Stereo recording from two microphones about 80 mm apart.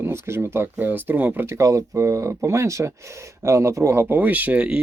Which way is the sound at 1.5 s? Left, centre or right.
Right.